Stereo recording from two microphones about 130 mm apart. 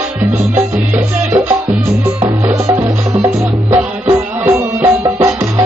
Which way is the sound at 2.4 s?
20° right (ahead or behind).